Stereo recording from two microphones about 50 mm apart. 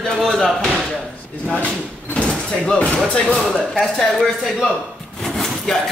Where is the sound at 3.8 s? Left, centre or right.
Centre.